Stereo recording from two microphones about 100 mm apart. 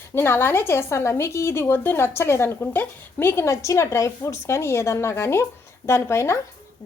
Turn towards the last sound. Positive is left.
turn(degrees=25)  # may be behind; listen again after turning